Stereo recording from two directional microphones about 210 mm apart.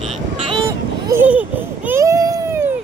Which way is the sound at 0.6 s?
15° right (ahead or behind).